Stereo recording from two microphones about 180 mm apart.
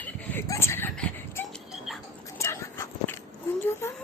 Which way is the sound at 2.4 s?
15° left (ahead or behind).